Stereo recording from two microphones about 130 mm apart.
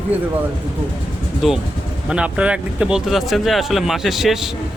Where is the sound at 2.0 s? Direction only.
5° right (ahead or behind).